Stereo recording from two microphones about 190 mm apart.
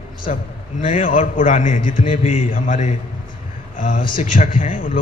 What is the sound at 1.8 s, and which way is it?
Speech, 30° left (ahead or behind).